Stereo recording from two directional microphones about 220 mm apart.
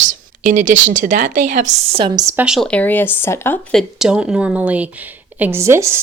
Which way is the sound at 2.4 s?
Centre (ahead or behind).